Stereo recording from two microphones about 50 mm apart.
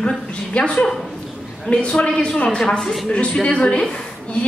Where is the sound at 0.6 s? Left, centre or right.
Left.